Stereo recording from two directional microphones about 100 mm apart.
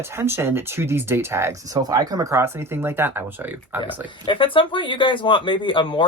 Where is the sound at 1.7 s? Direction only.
40° right (ahead or behind); by 3.9 s 20° right (ahead or behind).